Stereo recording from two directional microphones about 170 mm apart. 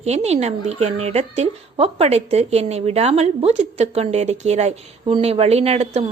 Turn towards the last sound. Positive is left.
turn(degrees=-40)  # may be behind; listen again after turning